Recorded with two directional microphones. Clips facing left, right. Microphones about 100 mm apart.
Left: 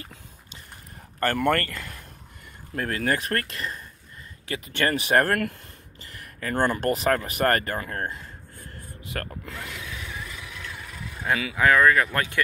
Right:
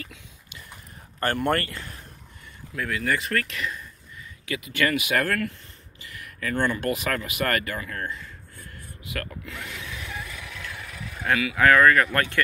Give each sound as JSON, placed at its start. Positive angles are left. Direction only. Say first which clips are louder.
{"t": 0.0, "sound": "a sound", "louder": "right 2 dB", "side_deg": 40}
{"t": 1.2, "sound": "speech", "louder": "left 1 dB", "side_deg": 45}
{"t": 3.4, "sound": "speech", "louder": "right 2 dB", "side_deg": 35}
{"t": 11.5, "sound": "speech", "louder": "right 1 dB", "side_deg": 15}